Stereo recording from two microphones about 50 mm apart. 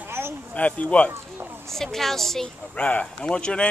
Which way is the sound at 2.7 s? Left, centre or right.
Left.